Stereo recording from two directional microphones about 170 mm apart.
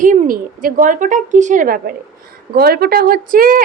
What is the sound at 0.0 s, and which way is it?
A woman's voice, 50° right (ahead or behind).